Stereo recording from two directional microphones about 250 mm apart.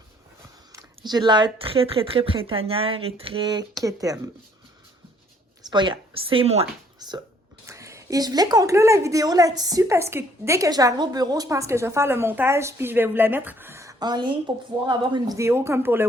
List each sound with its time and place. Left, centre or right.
0.7 s a sound: centre
1.5 s a woman's voice: right
5.7 s a woman's voice: centre